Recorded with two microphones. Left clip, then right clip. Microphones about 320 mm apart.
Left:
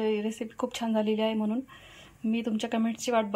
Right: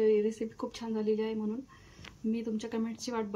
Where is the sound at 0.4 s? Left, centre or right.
Centre.